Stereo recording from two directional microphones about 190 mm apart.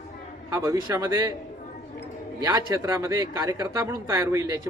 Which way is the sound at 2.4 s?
15° right (ahead or behind).